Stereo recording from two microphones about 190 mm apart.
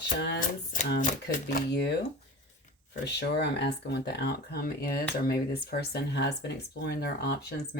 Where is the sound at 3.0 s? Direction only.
60° left (ahead or behind).